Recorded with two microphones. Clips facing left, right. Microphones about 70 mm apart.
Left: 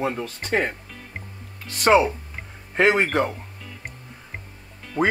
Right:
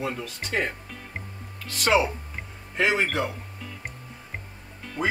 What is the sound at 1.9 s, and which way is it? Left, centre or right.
Speech, left.